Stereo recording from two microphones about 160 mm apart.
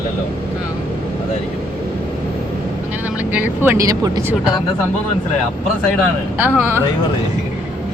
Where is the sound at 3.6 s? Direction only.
15° right (ahead or behind).